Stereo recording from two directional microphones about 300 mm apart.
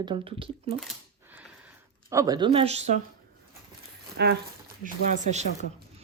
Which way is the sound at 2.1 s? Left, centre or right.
Centre.